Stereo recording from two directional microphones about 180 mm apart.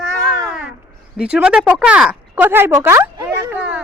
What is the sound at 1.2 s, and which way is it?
Speech, 5° right (ahead or behind).